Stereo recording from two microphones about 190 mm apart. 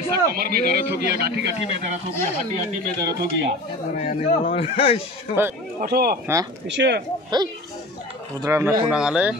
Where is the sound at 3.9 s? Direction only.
40° left (ahead or behind).